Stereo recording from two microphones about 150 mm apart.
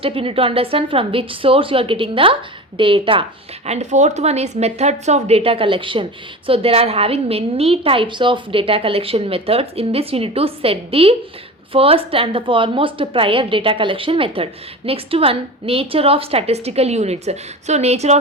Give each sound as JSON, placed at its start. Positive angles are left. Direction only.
{"t": 0.0, "sound": "a woman's voice", "side_deg": -40}
{"t": 3.7, "sound": "a woman's voice", "side_deg": -50}